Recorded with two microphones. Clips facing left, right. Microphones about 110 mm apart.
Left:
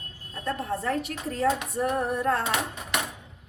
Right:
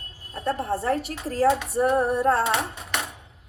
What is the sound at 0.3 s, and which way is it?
A woman's voice, 30° right (ahead or behind).